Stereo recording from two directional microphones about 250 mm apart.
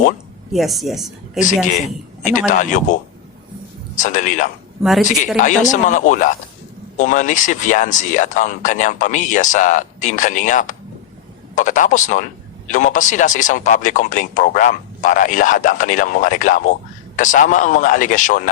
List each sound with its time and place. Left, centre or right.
0.5 s speech: centre
2.5 s speech: left
4.8 s speech: centre
5.0 s speech: left